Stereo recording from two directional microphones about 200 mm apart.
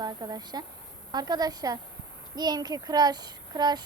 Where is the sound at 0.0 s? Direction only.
20° right (ahead or behind).